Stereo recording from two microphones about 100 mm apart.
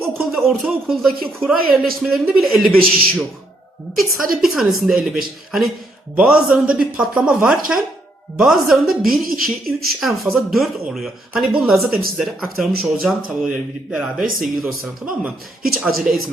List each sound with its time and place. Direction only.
0.2 s a woman's voice: centre (ahead or behind)
13.5 s speech: 15° right (ahead or behind)
14.4 s a woman's voice: 5° right (ahead or behind)